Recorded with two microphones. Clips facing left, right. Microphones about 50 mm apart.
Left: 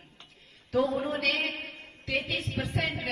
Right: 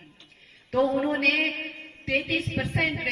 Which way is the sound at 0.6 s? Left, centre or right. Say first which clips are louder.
Right 4 dB; right.